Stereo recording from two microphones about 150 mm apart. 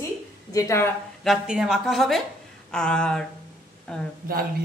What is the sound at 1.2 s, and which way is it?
A woman's voice, 5° right (ahead or behind).